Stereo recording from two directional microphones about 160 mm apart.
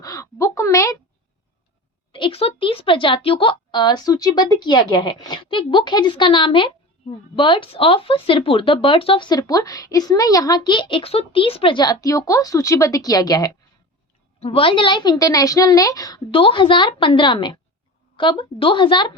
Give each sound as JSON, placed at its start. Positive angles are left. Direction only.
{"t": 0.0, "sound": "a sound", "side_deg": 20}
{"t": 2.1, "sound": "a woman's voice", "side_deg": 35}
{"t": 14.3, "sound": "a woman's voice", "side_deg": 40}